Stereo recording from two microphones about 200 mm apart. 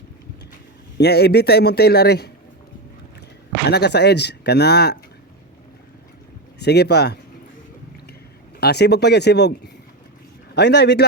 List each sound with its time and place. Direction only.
0.9 s a man's voice: 55° left (ahead or behind)
3.7 s speech: 55° left (ahead or behind)
6.6 s speech: 55° left (ahead or behind)
8.6 s speech: 55° left (ahead or behind)